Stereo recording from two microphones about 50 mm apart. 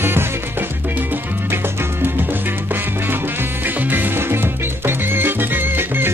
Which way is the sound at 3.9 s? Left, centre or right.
Right.